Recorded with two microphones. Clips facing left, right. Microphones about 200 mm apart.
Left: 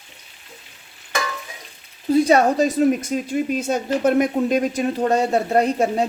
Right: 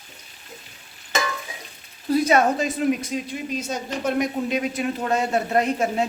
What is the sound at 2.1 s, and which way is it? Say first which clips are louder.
Speech: left 3 dB; 35° left (ahead or behind).